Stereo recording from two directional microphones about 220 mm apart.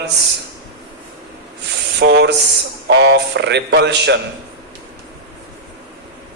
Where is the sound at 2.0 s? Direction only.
50° right (ahead or behind).